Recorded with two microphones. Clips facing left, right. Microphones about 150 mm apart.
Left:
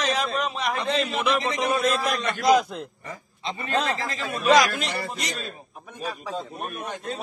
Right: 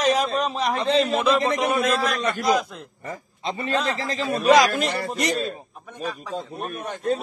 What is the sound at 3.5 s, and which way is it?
A man's voice, 35° right (ahead or behind).